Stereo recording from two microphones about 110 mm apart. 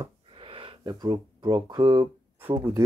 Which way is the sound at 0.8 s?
40° right (ahead or behind).